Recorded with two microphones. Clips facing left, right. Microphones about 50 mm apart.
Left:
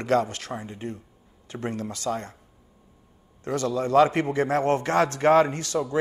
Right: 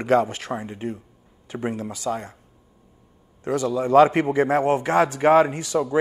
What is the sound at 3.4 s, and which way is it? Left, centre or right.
A man's voice, centre.